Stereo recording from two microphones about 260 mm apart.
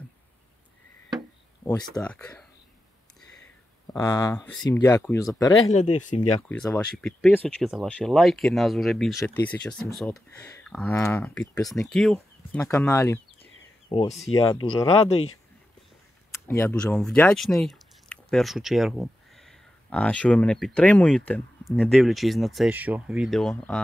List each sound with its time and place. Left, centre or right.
1.6 s speech: centre
3.9 s speech: centre
5.9 s speech: left
6.5 s speech: centre
13.8 s speech: left
16.3 s speech: centre